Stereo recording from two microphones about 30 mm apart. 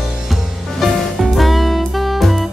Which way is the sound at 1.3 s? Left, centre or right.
Centre.